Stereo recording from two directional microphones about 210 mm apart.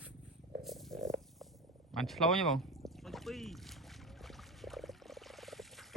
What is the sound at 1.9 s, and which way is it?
Speech, centre (ahead or behind).